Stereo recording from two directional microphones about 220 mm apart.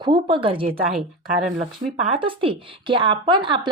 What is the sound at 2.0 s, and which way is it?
Speech, 25° right (ahead or behind).